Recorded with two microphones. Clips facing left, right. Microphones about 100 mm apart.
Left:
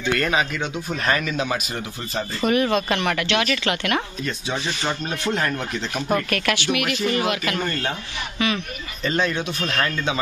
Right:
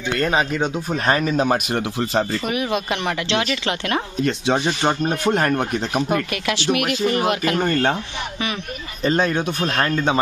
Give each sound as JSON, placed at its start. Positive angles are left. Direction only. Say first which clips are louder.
{"t": 0.0, "sound": "speech", "louder": "right 1 dB", "side_deg": -20}
{"t": 0.3, "sound": "speech", "louder": "right 3 dB", "side_deg": -35}
{"t": 1.7, "sound": "speech", "louder": "right 8 dB", "side_deg": -70}
{"t": 2.4, "sound": "speech", "louder": "left 3 dB", "side_deg": -10}
{"t": 4.2, "sound": "speech", "louder": "right 8 dB", "side_deg": -65}
{"t": 4.6, "sound": "speech", "louder": "right 6 dB", "side_deg": -45}
{"t": 6.5, "sound": "speech", "louder": "right 5 dB", "side_deg": -40}
{"t": 9.0, "sound": "speech", "louder": "right 4 dB", "side_deg": -40}